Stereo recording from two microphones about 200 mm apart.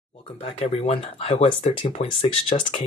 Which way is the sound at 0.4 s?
30° left (ahead or behind).